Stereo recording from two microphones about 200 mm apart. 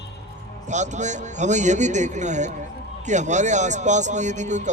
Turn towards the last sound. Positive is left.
turn(degrees=-35)  # may be behind; listen again after turning